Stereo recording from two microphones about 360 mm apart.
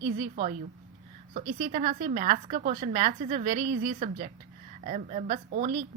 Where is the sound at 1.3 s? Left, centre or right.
Right.